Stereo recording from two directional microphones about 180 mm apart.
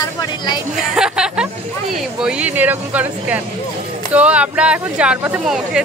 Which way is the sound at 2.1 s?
5° right (ahead or behind).